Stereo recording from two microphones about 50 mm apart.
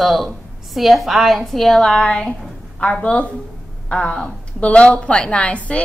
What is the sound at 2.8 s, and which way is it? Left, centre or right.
A woman's voice, left.